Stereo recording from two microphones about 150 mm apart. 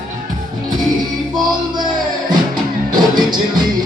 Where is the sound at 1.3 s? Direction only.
30° right (ahead or behind).